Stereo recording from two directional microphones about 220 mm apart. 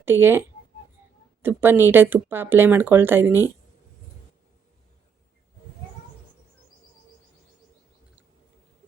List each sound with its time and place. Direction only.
0.0 s speech: 10° right (ahead or behind)